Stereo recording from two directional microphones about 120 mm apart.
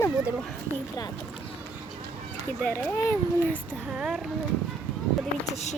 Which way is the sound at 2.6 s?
20° left (ahead or behind).